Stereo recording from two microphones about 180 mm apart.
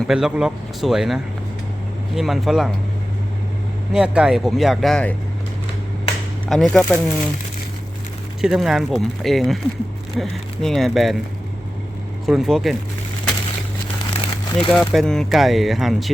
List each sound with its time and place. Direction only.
0.1 s speech: 5° right (ahead or behind)
3.9 s speech: 5° right (ahead or behind)
6.5 s speech: centre (ahead or behind)
8.4 s speech: 5° right (ahead or behind)
12.2 s speech: centre (ahead or behind)
14.0 s crumpling: 25° left (ahead or behind)
14.7 s speech: 5° left (ahead or behind)